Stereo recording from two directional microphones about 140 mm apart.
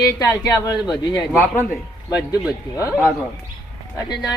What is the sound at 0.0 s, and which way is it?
Speech, 25° left (ahead or behind).